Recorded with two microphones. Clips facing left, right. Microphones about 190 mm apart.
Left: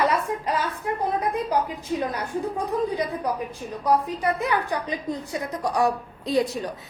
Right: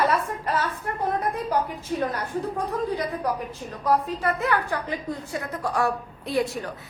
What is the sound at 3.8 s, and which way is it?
A woman's voice, 15° left (ahead or behind).